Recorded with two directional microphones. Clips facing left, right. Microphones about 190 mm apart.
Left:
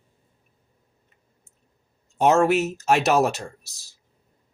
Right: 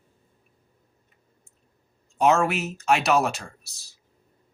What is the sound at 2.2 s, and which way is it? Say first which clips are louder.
Speech: left 2 dB; 35° left (ahead or behind).